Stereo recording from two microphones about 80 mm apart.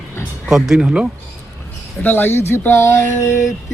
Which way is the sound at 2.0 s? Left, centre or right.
Left.